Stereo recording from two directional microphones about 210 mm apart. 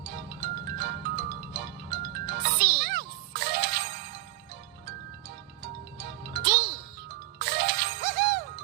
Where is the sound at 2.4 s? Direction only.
50° right (ahead or behind).